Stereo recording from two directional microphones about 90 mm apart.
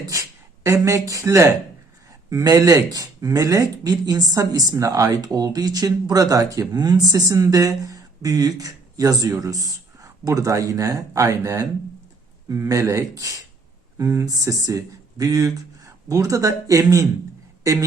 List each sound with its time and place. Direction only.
0.0 s speech: 40° right (ahead or behind)
2.3 s speech: 45° right (ahead or behind)